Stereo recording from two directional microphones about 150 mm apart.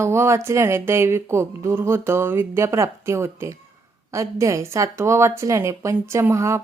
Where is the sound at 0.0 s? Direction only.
20° right (ahead or behind).